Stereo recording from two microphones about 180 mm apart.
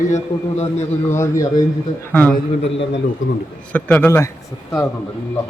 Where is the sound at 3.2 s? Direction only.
90° left.